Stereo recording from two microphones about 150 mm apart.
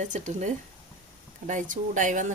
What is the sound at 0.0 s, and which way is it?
Speech, 55° right (ahead or behind).